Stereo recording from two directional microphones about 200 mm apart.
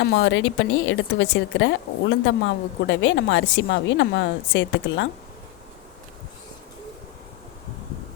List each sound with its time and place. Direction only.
0.0 s a woman's voice: 65° left (ahead or behind)